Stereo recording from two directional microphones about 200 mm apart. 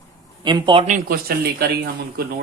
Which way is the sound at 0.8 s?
45° right (ahead or behind).